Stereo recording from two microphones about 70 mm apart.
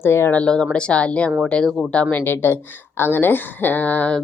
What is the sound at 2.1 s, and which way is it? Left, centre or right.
A woman's voice, left.